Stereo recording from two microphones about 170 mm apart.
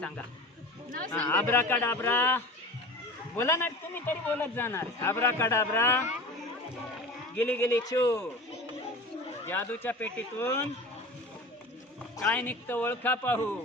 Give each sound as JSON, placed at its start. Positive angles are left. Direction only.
{"t": 0.9, "sound": "speech", "side_deg": -55}
{"t": 1.2, "sound": "a man's voice", "side_deg": 10}
{"t": 7.3, "sound": "a man's voice", "side_deg": 10}
{"t": 9.5, "sound": "a man's voice", "side_deg": 10}
{"t": 12.2, "sound": "a man's voice", "side_deg": 10}